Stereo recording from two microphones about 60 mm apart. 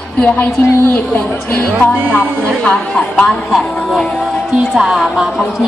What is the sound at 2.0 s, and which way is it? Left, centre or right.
Speech, right.